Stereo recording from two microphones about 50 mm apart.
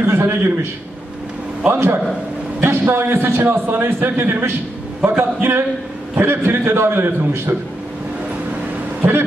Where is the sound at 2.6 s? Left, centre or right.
Right.